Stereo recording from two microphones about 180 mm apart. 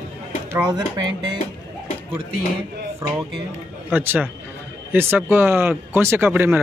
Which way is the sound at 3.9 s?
10° right (ahead or behind).